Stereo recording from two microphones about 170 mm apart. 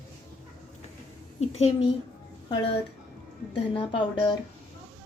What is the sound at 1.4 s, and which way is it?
Speech, 40° left (ahead or behind).